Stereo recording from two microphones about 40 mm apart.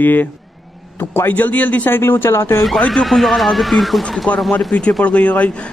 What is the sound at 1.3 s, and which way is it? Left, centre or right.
Speech, left.